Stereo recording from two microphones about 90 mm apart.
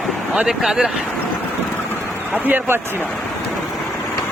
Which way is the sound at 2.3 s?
20° right (ahead or behind).